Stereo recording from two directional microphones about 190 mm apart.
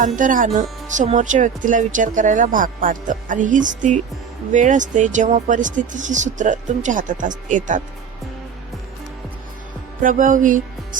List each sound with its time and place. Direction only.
0.2 s speech: 45° right (ahead or behind)
10.0 s speech: 45° right (ahead or behind)